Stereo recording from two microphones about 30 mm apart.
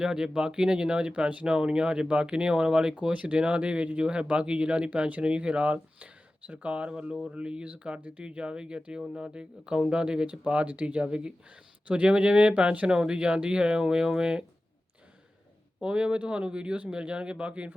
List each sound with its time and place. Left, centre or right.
0.0 s speech: right
3.1 s speech: right
10.7 s speech: right
11.1 s speech: right
15.8 s speech: right